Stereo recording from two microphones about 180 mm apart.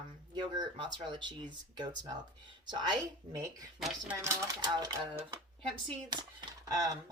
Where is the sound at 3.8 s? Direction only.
Centre (ahead or behind).